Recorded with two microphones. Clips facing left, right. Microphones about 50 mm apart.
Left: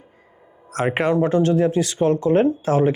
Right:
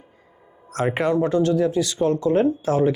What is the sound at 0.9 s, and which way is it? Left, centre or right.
Speech, left.